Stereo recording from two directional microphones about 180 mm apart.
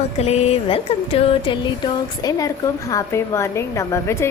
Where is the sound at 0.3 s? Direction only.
35° left (ahead or behind).